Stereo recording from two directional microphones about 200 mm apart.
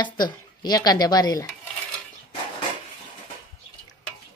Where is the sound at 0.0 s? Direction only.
20° left (ahead or behind).